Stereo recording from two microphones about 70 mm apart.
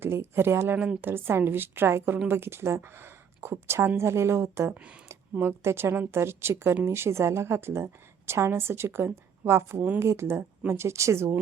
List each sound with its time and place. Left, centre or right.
0.0 s a woman's voice: right
4.7 s speech: centre
5.3 s a woman's voice: right